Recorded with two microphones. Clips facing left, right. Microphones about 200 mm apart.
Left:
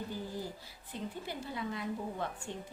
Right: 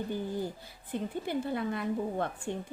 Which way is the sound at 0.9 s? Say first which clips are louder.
Right 8 dB; 55° right (ahead or behind).